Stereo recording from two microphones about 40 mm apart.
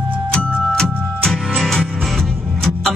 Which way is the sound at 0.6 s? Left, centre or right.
Centre.